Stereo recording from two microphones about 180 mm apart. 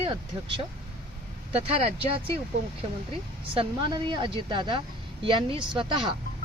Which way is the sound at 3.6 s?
25° right (ahead or behind).